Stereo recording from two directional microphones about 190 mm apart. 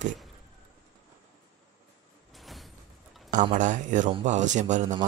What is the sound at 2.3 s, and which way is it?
Door, centre (ahead or behind).